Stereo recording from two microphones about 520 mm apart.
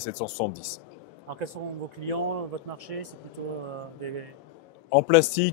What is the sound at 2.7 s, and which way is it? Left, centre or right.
Speech, right.